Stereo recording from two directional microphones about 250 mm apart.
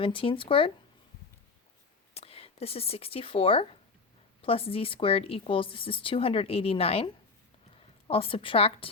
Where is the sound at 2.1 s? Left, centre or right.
Left.